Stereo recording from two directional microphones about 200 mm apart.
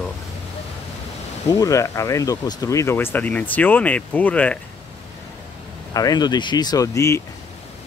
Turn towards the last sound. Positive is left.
turn(degrees=15)  # may be behind; listen again after turning